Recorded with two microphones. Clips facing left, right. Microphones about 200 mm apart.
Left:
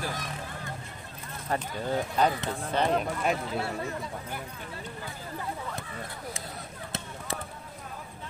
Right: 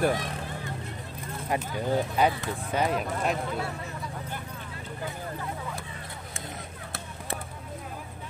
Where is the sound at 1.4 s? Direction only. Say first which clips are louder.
Right 2 dB; 10° right (ahead or behind).